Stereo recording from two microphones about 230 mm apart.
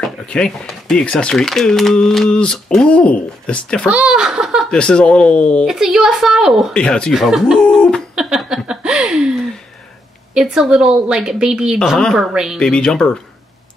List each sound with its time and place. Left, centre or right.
0.0 s speech: centre